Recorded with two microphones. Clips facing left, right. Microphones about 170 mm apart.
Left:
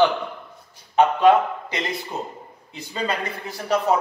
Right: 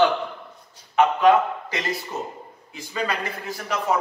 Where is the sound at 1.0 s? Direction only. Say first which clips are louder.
Left 1 dB; 35° left (ahead or behind).